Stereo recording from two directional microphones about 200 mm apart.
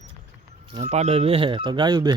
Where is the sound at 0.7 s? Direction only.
35° right (ahead or behind).